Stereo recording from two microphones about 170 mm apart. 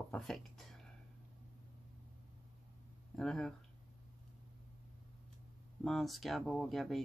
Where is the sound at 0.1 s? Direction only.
Centre (ahead or behind).